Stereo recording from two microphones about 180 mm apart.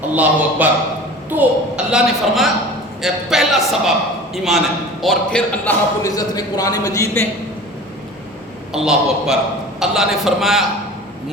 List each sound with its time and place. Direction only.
0.1 s a man's voice: 10° right (ahead or behind)
6.0 s speech: 20° left (ahead or behind)
8.7 s a man's voice: centre (ahead or behind)